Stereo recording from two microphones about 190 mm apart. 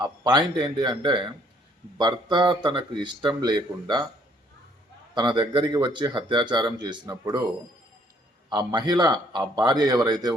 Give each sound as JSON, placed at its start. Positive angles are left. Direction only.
{"t": 0.0, "sound": "speech", "side_deg": -20}
{"t": 5.1, "sound": "speech", "side_deg": -25}
{"t": 8.4, "sound": "speech", "side_deg": -20}